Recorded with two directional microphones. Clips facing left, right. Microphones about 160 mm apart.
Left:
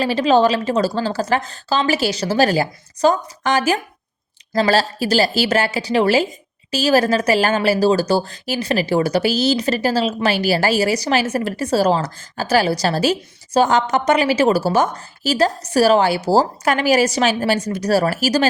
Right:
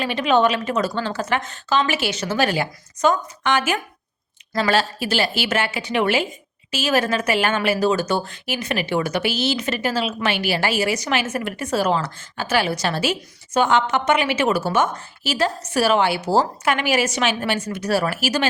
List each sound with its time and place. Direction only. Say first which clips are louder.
0.0 s a woman's voice: left 3 dB; 35° left (ahead or behind)